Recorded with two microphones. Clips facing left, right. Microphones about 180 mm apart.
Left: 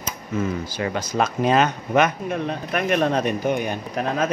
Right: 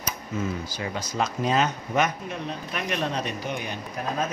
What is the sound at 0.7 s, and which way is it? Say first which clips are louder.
Speech: left 7 dB; 60° left (ahead or behind).